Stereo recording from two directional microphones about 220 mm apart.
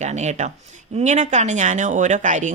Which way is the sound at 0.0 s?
30° right (ahead or behind).